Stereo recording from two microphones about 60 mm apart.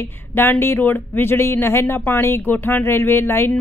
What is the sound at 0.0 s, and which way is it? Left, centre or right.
A woman's voice, left.